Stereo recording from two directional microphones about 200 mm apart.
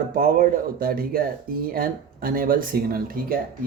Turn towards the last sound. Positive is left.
turn(degrees=-45)  # may be behind; listen again after turning